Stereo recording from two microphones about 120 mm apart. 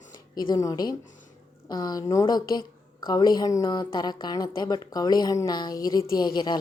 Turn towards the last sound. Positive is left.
turn(degrees=40)  # may be behind; listen again after turning